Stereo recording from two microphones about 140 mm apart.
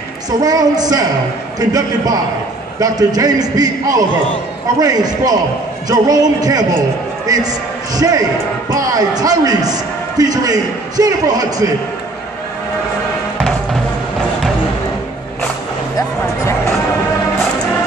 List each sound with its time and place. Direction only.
0.4 s a man's voice: 25° right (ahead or behind)